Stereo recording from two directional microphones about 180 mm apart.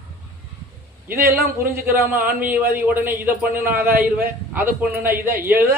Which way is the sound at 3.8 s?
55° right (ahead or behind).